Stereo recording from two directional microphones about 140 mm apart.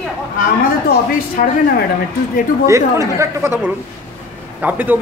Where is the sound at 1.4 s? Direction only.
70° left (ahead or behind).